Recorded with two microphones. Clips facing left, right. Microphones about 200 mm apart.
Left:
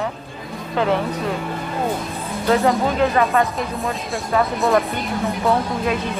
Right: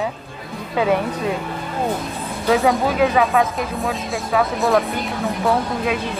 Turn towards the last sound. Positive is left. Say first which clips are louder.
# even
turn(degrees=0)  # may be behind; listen again after turning